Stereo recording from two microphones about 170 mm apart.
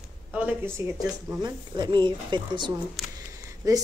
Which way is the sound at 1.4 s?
25° right (ahead or behind).